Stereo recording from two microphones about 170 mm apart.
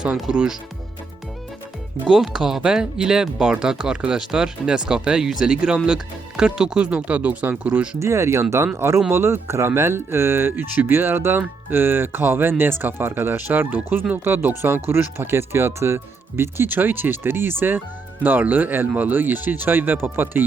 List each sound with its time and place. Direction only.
0.0 s speech: 5° right (ahead or behind)
2.0 s speech: centre (ahead or behind)